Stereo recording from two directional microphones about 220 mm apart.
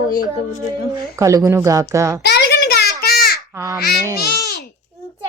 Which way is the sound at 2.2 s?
50° left (ahead or behind).